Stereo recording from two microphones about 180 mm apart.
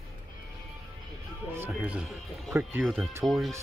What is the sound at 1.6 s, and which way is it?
Speech, 5° right (ahead or behind).